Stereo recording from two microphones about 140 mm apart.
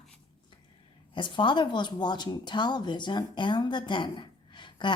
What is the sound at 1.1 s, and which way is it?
Speech, 35° left (ahead or behind).